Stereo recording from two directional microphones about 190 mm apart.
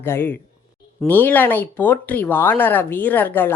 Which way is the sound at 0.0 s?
10° left (ahead or behind).